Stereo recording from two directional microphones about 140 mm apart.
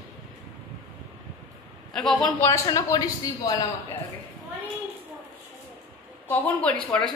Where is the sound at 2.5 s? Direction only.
25° left (ahead or behind).